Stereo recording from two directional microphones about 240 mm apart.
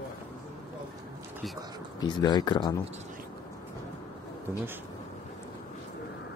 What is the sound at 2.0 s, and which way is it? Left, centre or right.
Speech, centre.